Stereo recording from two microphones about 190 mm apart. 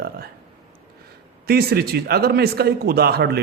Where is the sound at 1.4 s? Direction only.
55° right (ahead or behind).